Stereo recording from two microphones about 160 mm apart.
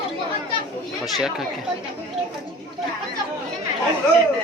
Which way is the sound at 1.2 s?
5° right (ahead or behind).